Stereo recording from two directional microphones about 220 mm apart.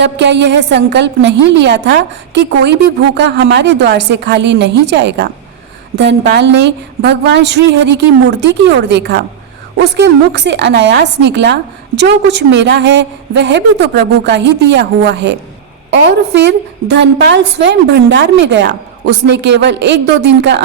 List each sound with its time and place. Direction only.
0.0 s a woman's voice: 50° right (ahead or behind)